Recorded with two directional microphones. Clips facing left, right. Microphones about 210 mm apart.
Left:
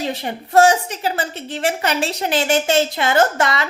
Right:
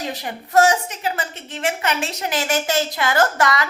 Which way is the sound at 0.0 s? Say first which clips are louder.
Left 4 dB; 25° left (ahead or behind).